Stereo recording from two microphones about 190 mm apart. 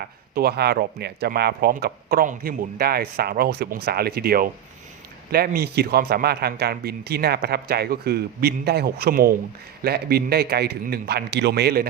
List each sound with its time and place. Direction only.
0.3 s a man's voice: 55° right (ahead or behind)